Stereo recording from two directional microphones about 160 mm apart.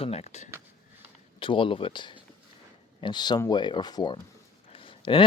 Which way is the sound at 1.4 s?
30° left (ahead or behind).